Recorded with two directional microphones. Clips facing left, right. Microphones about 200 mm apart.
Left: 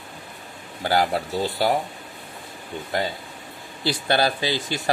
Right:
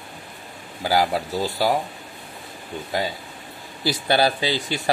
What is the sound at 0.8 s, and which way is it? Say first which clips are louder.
Speech: right 1 dB; centre (ahead or behind).